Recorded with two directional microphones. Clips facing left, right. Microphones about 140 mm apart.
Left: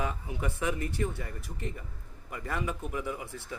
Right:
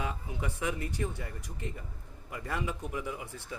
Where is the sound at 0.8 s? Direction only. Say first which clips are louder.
Left 2 dB; 15° right (ahead or behind).